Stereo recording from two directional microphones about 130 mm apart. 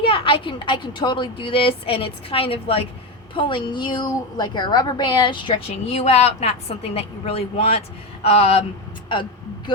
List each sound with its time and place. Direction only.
0.0 s a woman's voice: 45° left (ahead or behind)
5.9 s a woman's voice: 55° left (ahead or behind)